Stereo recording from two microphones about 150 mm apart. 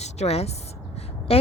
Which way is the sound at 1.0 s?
40° left (ahead or behind).